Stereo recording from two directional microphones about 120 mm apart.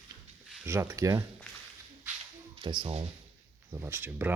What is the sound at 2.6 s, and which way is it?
Speech, 40° right (ahead or behind).